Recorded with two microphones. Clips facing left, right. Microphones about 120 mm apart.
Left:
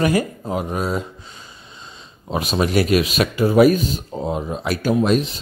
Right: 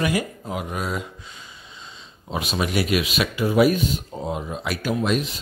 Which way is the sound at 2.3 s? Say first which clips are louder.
Left 5 dB; 40° left (ahead or behind).